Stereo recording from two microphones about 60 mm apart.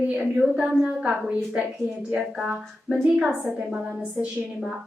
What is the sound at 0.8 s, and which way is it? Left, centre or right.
Speech, right.